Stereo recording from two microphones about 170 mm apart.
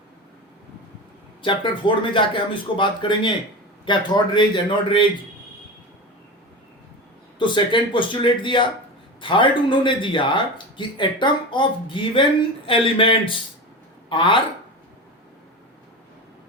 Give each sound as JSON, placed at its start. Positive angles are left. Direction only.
{"t": 1.4, "sound": "speech", "side_deg": 30}
{"t": 7.3, "sound": "speech", "side_deg": 30}